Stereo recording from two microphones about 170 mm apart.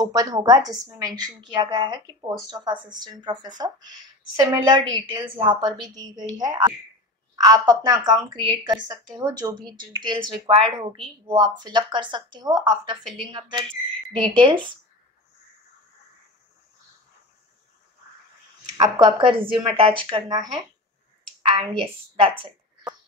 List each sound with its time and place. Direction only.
0.0 s a woman's voice: 20° right (ahead or behind)
18.8 s a woman's voice: 25° right (ahead or behind)